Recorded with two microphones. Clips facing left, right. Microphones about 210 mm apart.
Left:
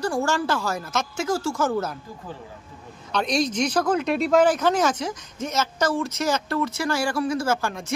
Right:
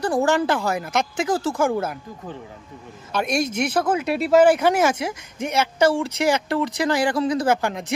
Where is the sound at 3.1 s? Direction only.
10° right (ahead or behind).